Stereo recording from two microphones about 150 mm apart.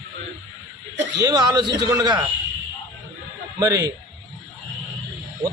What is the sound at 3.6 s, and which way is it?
Speech, 25° right (ahead or behind).